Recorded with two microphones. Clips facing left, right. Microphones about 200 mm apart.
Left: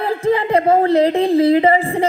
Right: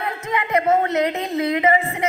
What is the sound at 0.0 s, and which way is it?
A man's voice, 30° left (ahead or behind).